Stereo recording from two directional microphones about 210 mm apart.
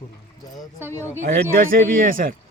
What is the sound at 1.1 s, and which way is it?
A man's voice, 45° right (ahead or behind).